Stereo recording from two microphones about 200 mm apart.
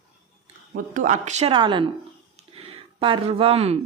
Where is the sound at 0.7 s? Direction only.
40° right (ahead or behind).